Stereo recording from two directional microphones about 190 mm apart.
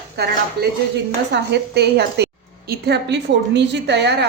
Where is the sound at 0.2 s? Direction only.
55° right (ahead or behind).